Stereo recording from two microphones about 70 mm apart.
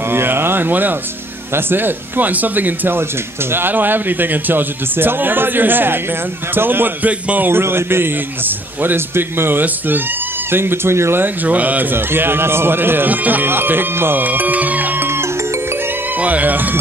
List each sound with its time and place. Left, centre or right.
0.1 s a sound: right
1.5 s a man's voice: right
11.4 s a man's voice: right
16.2 s music: right